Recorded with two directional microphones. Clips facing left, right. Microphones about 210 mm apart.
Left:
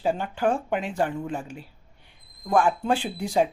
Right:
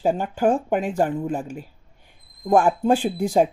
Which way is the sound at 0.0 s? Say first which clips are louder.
Right 4 dB; 45° right (ahead or behind).